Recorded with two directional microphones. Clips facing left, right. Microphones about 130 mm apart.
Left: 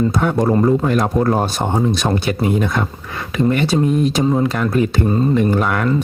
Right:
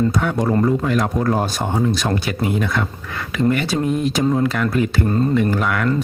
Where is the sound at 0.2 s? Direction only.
35° left (ahead or behind).